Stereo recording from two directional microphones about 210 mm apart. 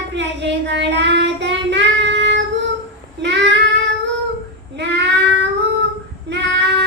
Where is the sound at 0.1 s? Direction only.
55° right (ahead or behind).